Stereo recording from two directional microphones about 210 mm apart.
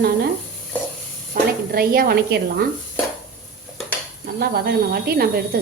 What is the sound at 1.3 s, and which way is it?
Speech, 45° right (ahead or behind).